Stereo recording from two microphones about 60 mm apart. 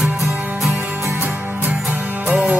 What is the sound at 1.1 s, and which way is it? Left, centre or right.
Music, right.